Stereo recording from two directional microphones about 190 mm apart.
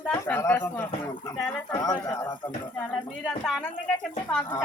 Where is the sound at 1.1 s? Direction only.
20° left (ahead or behind).